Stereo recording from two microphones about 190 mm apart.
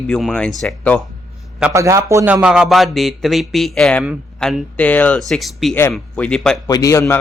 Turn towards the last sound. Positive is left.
turn(degrees=15)  # may be behind; listen again after turning